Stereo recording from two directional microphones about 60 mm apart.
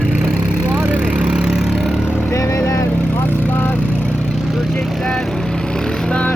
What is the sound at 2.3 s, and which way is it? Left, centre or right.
Vehicle, left.